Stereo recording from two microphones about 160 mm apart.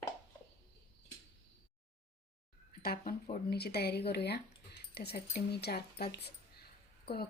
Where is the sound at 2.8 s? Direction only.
65° left (ahead or behind); by 6.3 s 90° left.